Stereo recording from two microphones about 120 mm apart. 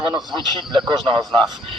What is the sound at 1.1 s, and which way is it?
Speech, 45° right (ahead or behind).